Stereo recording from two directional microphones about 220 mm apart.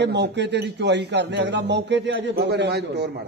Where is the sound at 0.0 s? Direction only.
50° right (ahead or behind).